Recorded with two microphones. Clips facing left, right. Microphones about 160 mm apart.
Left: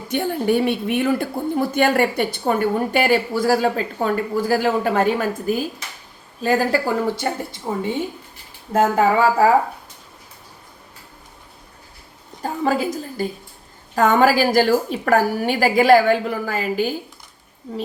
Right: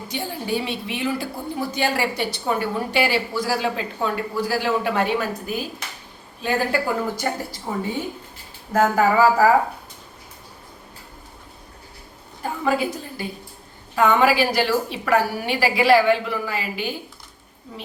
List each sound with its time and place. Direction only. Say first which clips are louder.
0.1 s a woman's voice: left 7 dB; 55° left (ahead or behind)
6.4 s a woman's voice: left 4 dB; 40° left (ahead or behind)
7.2 s speech: left 1 dB; 20° left (ahead or behind)
12.4 s a sound: left 2 dB; 35° left (ahead or behind)
13.9 s a woman's voice: left 2 dB; 45° left (ahead or behind)